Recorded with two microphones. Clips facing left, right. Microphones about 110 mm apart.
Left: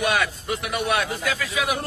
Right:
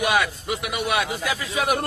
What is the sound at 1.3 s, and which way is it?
Speech, 25° right (ahead or behind).